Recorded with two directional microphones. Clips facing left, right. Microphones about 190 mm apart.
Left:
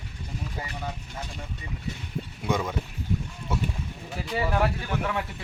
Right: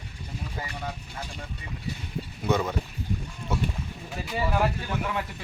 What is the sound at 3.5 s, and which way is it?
Rowboat, 10° left (ahead or behind).